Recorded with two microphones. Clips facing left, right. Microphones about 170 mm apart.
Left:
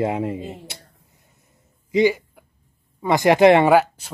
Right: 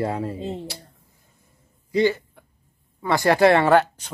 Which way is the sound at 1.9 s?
15° left (ahead or behind).